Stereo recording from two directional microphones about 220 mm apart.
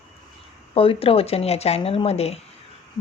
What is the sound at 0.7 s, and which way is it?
A woman's voice, 25° left (ahead or behind).